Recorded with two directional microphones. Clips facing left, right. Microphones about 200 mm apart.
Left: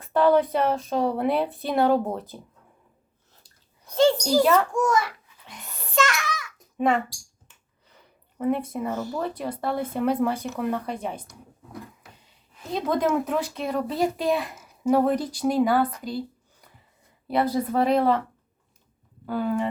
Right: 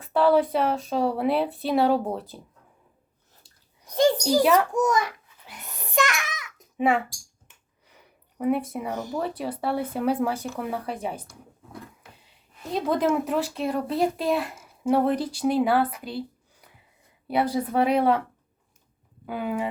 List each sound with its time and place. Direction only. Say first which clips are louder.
0.0 s speech: even; centre (ahead or behind)
3.8 s a sound: left 1 dB; 15° right (ahead or behind)
4.5 s speech: even; 20° right (ahead or behind)
5.5 s a sound: even; centre (ahead or behind)
5.7 s child singing: left 1 dB; 15° right (ahead or behind)
6.7 s a child's voice: even; 10° right (ahead or behind)
7.4 s a sound: even; 10° right (ahead or behind)
8.9 s speech: even; 15° right (ahead or behind)
9.4 s speech: even; 5° right (ahead or behind)
12.7 s speech: even; centre (ahead or behind)
19.2 s speech: left 3 dB; 10° right (ahead or behind)